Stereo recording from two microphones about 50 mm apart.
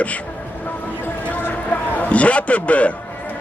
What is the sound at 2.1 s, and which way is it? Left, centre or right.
Speech, left.